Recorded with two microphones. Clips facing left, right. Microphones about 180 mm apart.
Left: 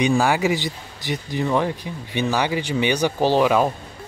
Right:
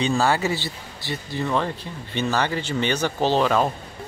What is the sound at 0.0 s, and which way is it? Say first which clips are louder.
Speech: left 3 dB; 15° left (ahead or behind).